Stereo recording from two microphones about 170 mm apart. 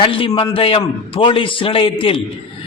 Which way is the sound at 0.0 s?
30° left (ahead or behind).